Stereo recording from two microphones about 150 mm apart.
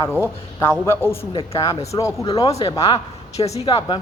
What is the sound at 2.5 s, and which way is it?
A woman's voice, 40° left (ahead or behind).